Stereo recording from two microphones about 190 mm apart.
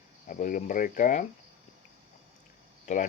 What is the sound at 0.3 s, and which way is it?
Speech, 45° left (ahead or behind).